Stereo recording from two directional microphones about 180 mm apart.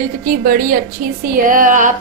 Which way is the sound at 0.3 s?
50° right (ahead or behind).